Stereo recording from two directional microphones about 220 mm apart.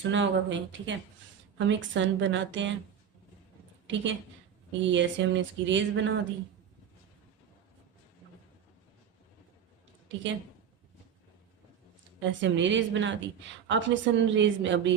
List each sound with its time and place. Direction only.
0.0 s a woman's voice: 55° right (ahead or behind)
3.8 s a woman's voice: 55° right (ahead or behind)
12.3 s a woman's voice: 55° right (ahead or behind)